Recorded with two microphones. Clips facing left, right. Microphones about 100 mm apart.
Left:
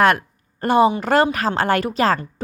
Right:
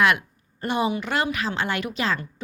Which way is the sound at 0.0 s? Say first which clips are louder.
Left 5 dB; 45° left (ahead or behind).